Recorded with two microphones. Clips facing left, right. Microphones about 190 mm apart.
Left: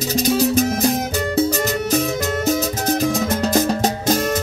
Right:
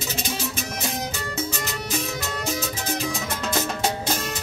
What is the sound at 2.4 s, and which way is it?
Music, 40° left (ahead or behind).